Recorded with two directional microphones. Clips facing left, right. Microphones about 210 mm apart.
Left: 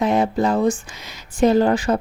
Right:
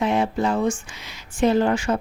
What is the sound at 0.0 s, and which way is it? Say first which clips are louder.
Speech: left 3 dB; 40° left (ahead or behind).